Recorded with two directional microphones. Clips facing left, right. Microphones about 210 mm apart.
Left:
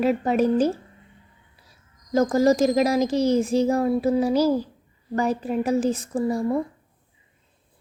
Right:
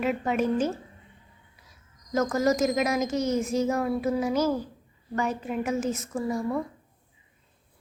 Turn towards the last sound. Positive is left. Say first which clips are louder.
# left 5 dB
turn(degrees=30)  # may be behind; listen again after turning